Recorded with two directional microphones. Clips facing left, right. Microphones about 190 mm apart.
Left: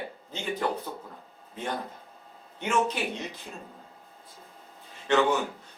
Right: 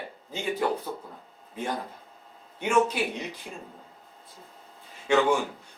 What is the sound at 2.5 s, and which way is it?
Speech, 10° right (ahead or behind).